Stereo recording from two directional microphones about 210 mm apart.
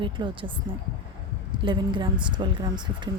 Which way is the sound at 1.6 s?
20° right (ahead or behind).